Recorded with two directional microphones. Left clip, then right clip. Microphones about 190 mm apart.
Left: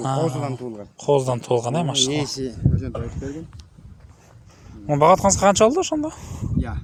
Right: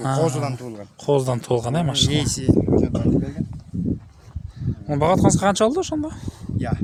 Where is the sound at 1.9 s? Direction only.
60° right (ahead or behind).